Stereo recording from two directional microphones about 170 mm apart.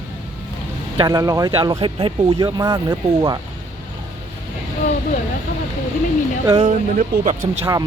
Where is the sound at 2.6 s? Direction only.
20° right (ahead or behind).